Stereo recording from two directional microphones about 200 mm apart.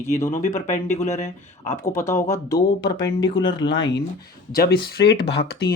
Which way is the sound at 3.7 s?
65° left (ahead or behind).